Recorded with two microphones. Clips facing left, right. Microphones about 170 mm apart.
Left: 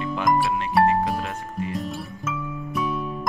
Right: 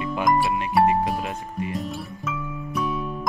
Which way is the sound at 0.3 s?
Centre (ahead or behind).